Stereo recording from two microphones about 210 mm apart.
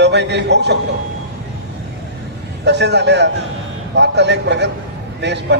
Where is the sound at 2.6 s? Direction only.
55° right (ahead or behind).